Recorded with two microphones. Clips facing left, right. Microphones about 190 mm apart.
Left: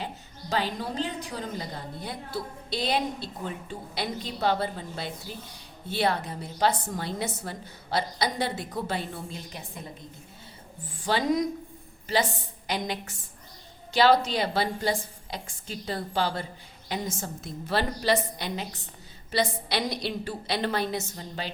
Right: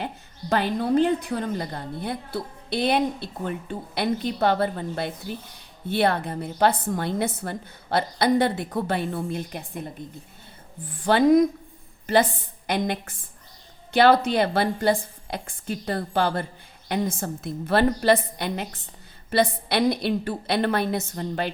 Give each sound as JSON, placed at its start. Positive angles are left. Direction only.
{"t": 0.5, "sound": "a woman's voice", "side_deg": -55}
{"t": 10.8, "sound": "a woman's voice", "side_deg": -55}